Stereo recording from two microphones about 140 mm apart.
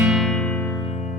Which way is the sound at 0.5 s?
20° left (ahead or behind).